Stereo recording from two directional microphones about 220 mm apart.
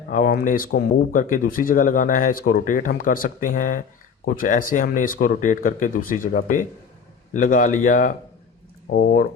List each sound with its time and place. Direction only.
0.1 s speech: 40° left (ahead or behind)